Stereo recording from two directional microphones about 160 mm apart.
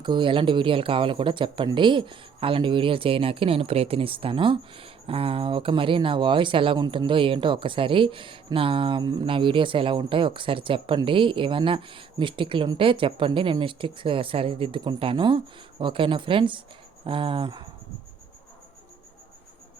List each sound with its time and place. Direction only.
0.0 s speech: 30° right (ahead or behind)